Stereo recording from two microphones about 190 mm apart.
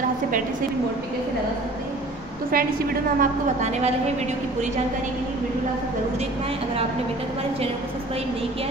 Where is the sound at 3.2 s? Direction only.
35° right (ahead or behind).